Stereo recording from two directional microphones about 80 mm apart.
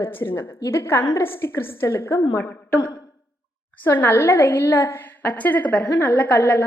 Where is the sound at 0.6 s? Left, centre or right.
Left.